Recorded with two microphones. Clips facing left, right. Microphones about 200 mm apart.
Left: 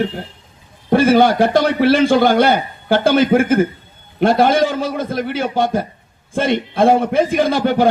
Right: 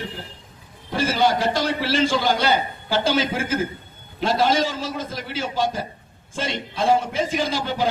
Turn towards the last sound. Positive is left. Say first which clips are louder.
# left 9 dB
turn(degrees=55)  # may be behind; listen again after turning